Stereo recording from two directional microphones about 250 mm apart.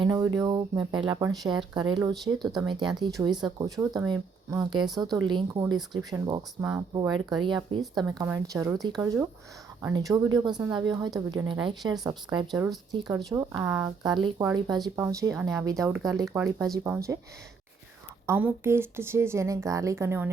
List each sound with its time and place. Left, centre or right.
0.0 s a sound: centre
0.3 s speech: centre
7.8 s speech: centre
8.1 s speech: centre
18.3 s speech: centre